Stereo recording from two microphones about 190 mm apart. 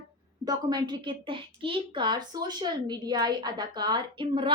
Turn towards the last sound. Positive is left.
turn(degrees=-25)  # may be behind; listen again after turning